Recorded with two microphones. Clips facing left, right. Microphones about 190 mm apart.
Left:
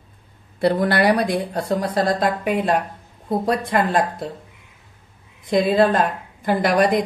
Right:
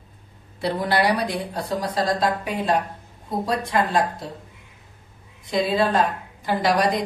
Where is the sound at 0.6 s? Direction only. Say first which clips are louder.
Left 4 dB; 55° left (ahead or behind).